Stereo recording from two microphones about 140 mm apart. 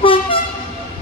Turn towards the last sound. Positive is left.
turn(degrees=40)  # may be behind; listen again after turning